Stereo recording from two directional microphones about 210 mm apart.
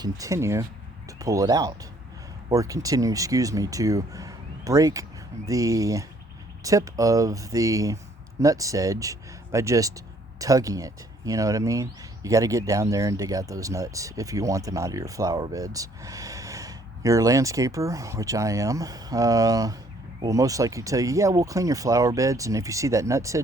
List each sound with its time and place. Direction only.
0.0 s speech: 15° right (ahead or behind)